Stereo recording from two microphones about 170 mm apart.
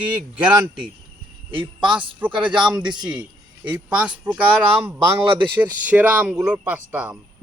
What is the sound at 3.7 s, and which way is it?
Speech, 10° right (ahead or behind).